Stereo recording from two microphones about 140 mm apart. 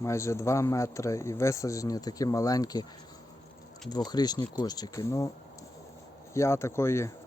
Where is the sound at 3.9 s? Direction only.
30° left (ahead or behind).